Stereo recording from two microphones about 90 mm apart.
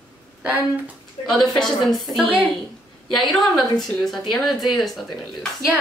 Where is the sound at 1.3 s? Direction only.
5° left (ahead or behind).